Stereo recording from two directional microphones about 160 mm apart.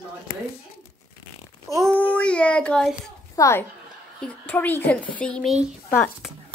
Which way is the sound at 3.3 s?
20° left (ahead or behind).